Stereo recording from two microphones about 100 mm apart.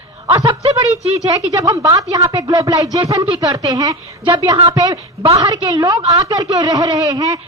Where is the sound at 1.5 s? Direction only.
35° right (ahead or behind).